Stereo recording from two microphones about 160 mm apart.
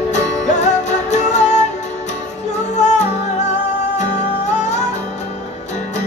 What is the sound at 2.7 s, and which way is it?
Music, 45° left (ahead or behind).